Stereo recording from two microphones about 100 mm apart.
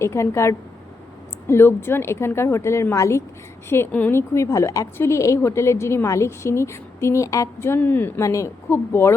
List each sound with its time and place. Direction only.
0.0 s a woman's voice: 30° left (ahead or behind)
8.2 s a woman's voice: 30° left (ahead or behind)